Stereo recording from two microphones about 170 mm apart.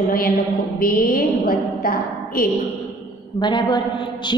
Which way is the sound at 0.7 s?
60° left (ahead or behind).